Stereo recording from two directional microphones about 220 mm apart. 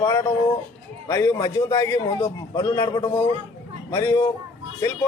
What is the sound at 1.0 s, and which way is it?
Speech, 15° left (ahead or behind).